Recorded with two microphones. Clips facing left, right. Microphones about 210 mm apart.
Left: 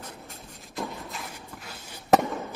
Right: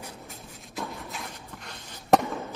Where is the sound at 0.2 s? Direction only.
Centre (ahead or behind).